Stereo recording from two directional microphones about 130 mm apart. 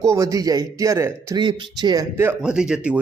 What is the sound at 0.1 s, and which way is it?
Speech, 25° right (ahead or behind).